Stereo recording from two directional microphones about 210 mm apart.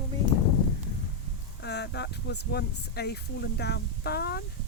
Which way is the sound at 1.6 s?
55° left (ahead or behind).